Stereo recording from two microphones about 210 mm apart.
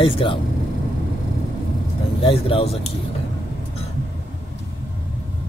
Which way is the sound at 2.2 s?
25° left (ahead or behind).